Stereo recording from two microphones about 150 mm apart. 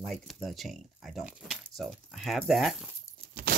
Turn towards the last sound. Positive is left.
turn(degrees=-65)  # may be behind; listen again after turning